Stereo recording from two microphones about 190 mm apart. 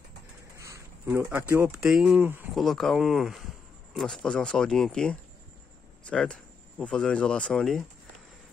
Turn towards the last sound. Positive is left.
turn(degrees=5)  # may be behind; listen again after turning